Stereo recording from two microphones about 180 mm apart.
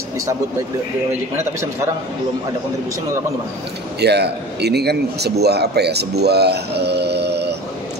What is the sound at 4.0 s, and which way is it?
A man's voice, 65° right (ahead or behind).